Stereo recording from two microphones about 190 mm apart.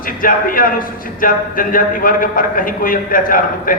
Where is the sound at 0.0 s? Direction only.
45° left (ahead or behind).